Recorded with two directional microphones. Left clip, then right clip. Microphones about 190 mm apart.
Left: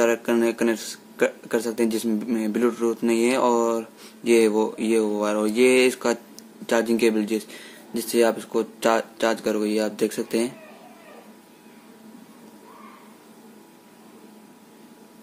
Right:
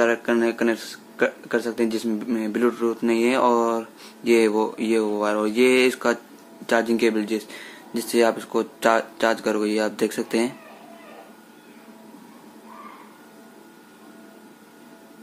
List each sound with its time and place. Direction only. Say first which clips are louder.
0.0 s a man's voice: even; 20° left (ahead or behind)